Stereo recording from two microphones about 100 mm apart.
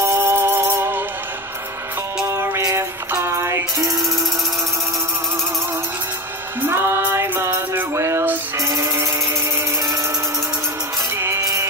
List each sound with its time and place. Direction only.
0.0 s music: 25° right (ahead or behind)
2.2 s music: 25° right (ahead or behind)
6.6 s music: 25° right (ahead or behind)
11.1 s music: 30° right (ahead or behind)